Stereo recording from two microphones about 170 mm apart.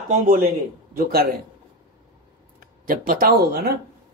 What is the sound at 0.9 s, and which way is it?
Speech, 65° right (ahead or behind).